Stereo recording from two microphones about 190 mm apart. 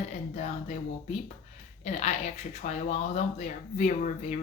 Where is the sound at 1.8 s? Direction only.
35° left (ahead or behind).